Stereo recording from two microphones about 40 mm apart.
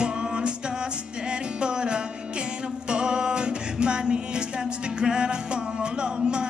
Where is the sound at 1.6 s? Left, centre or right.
Right.